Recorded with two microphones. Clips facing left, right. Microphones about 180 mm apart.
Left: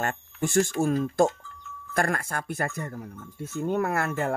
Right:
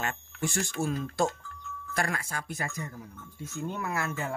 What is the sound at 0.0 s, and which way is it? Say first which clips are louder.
Speech: left 4 dB; 50° left (ahead or behind).